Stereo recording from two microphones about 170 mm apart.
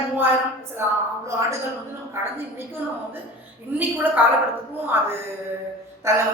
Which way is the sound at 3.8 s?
10° right (ahead or behind).